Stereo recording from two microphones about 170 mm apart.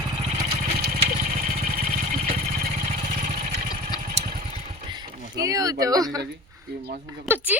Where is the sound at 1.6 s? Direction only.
55° right (ahead or behind).